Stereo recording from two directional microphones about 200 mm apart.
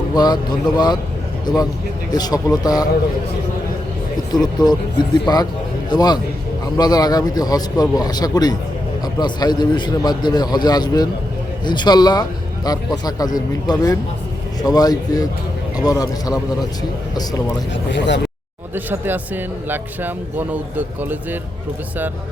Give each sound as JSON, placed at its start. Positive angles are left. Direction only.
{"t": 0.1, "sound": "speech", "side_deg": 20}
{"t": 1.5, "sound": "a man's voice", "side_deg": 20}
{"t": 4.3, "sound": "a man's voice", "side_deg": 20}
{"t": 17.9, "sound": "speech", "side_deg": 60}
{"t": 18.7, "sound": "speech", "side_deg": -10}